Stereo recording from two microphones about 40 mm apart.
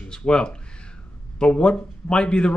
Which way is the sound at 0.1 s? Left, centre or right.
Left.